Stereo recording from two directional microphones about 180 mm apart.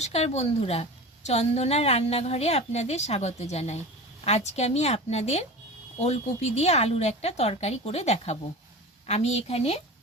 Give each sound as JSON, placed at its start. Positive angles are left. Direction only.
{"t": 0.0, "sound": "a woman's voice", "side_deg": 35}